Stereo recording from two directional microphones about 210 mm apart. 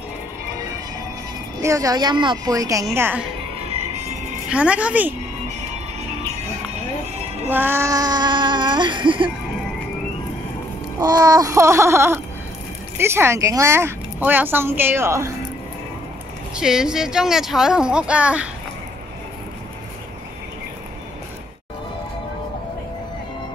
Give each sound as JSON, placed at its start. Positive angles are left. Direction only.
{"t": 1.6, "sound": "a woman's voice", "side_deg": -15}
{"t": 3.6, "sound": "music", "side_deg": -30}
{"t": 4.5, "sound": "speech", "side_deg": -5}
{"t": 7.4, "sound": "speech", "side_deg": -10}
{"t": 11.0, "sound": "a woman's voice", "side_deg": -15}
{"t": 16.5, "sound": "speech", "side_deg": -5}